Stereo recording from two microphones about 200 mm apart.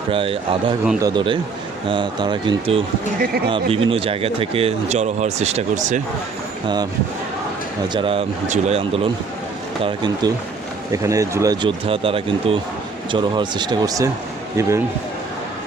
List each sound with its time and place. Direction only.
0.1 s speech: 25° right (ahead or behind)
3.2 s speech: 50° right (ahead or behind)
3.5 s speech: 25° right (ahead or behind)
7.9 s speech: 25° right (ahead or behind)